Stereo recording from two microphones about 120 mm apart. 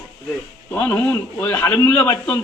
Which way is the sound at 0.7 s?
15° left (ahead or behind).